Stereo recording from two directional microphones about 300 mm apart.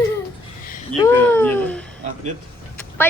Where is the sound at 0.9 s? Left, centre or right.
Centre.